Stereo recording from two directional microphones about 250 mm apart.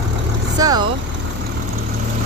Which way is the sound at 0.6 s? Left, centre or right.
Centre.